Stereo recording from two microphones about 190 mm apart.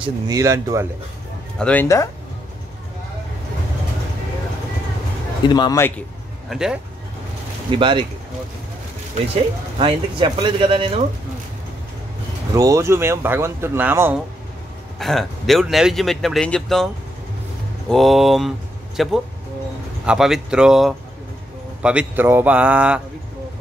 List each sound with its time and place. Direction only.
0.0 s speech: 20° right (ahead or behind)
1.6 s speech: 10° left (ahead or behind)
5.5 s speech: 20° left (ahead or behind)
6.5 s speech: centre (ahead or behind)
7.7 s speech: 25° right (ahead or behind)
9.8 s speech: 25° right (ahead or behind)
12.5 s speech: 15° right (ahead or behind)
15.0 s speech: centre (ahead or behind)